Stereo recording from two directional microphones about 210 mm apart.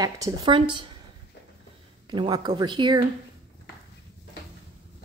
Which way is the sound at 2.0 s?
20° right (ahead or behind).